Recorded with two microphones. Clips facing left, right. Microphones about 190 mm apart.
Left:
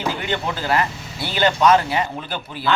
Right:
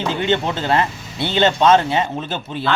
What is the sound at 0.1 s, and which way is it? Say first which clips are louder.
Speech: right 5 dB; 25° right (ahead or behind).